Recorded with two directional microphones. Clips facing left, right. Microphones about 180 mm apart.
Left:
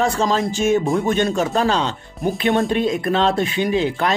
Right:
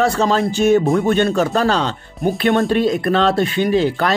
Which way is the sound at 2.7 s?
35° right (ahead or behind).